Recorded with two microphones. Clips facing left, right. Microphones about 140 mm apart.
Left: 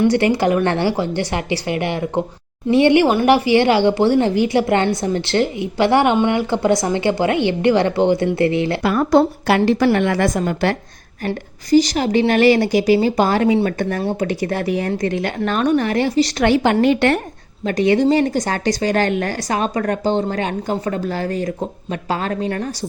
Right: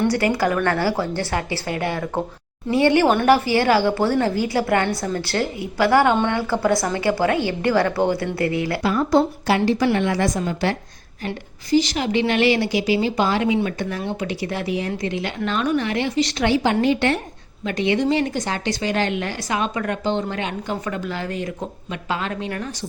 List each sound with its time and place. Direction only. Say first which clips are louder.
0.1 s a woman's voice: left 4 dB; 25° left (ahead or behind)
8.8 s a woman's voice: left 3 dB; 65° left (ahead or behind)
11.3 s a woman's voice: left 5 dB; 40° left (ahead or behind)
16.4 s a woman's voice: left 4 dB; 60° left (ahead or behind)
17.7 s speech: left 5 dB; 40° left (ahead or behind)